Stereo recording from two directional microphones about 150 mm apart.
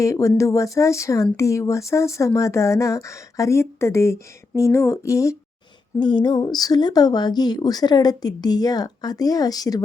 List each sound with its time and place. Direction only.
0.0 s speech: 20° left (ahead or behind)
6.0 s speech: 30° left (ahead or behind)